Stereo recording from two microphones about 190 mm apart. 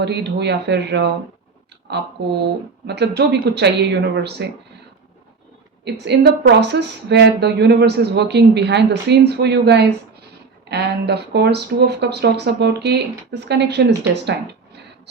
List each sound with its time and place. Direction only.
0.0 s speech: 60° right (ahead or behind)
5.8 s speech: 60° right (ahead or behind)